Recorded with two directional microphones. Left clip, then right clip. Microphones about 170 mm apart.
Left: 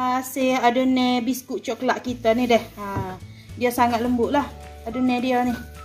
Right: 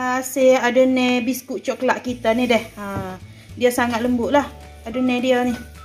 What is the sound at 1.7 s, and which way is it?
Speech, 20° right (ahead or behind).